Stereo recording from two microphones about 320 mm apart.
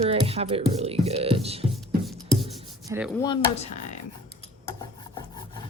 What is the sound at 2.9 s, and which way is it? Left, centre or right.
Speech, centre.